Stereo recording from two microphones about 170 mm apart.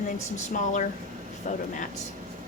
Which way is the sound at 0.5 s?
45° left (ahead or behind).